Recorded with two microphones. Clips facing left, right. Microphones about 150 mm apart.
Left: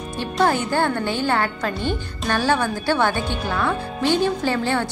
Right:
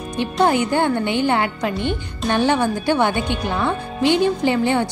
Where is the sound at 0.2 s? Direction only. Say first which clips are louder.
Right 3 dB; 15° right (ahead or behind).